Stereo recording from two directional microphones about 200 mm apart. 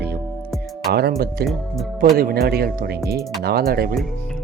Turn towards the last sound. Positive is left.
turn(degrees=-50)  # may be behind; listen again after turning